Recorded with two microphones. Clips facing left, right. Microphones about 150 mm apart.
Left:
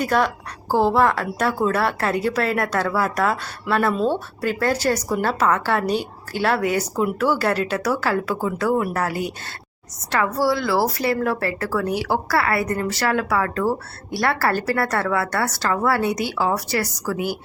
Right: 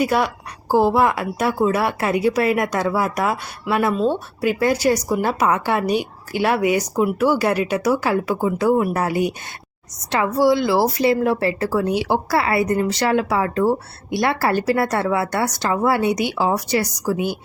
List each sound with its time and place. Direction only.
0.0 s a woman's voice: 10° right (ahead or behind)
3.9 s speech: centre (ahead or behind)
4.4 s a woman's voice: 10° right (ahead or behind)